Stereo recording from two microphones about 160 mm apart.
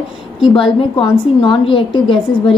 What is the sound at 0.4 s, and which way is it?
A woman's voice, 35° left (ahead or behind).